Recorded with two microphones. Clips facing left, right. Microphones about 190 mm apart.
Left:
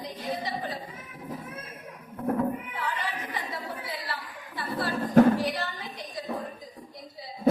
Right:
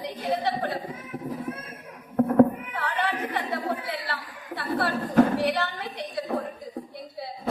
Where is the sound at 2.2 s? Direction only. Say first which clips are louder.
Right 9 dB; 65° right (ahead or behind).